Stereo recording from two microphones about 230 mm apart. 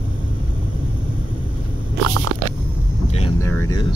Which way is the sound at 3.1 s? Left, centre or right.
Left.